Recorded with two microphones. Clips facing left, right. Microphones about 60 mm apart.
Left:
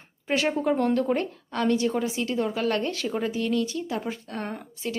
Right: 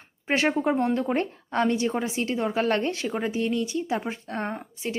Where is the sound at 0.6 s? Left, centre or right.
Right.